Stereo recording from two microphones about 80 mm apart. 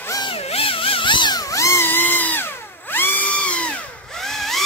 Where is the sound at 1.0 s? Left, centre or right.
Left.